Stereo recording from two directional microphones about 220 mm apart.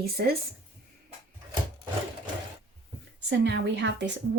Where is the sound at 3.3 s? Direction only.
50° right (ahead or behind).